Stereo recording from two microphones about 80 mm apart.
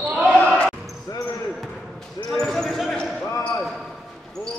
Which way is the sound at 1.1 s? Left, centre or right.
Left.